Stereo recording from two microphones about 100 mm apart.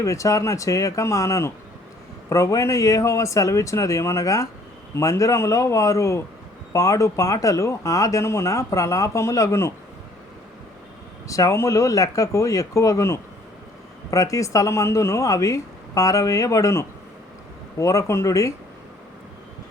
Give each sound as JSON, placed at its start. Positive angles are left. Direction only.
{"t": 0.0, "sound": "speech", "side_deg": 30}
{"t": 11.3, "sound": "speech", "side_deg": 30}